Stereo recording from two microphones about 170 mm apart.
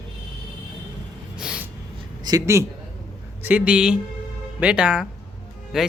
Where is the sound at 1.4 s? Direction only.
5° right (ahead or behind).